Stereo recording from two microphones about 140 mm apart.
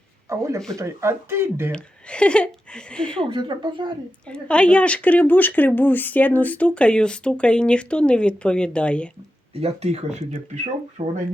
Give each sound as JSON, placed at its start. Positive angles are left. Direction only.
{"t": 0.3, "sound": "speech", "side_deg": -20}
{"t": 1.7, "sound": "speech", "side_deg": 5}
{"t": 3.2, "sound": "speech", "side_deg": -35}
{"t": 4.3, "sound": "speech", "side_deg": 10}
{"t": 9.6, "sound": "speech", "side_deg": -50}